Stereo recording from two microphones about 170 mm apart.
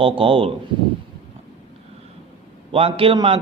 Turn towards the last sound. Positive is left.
turn(degrees=-30)  # may be behind; listen again after turning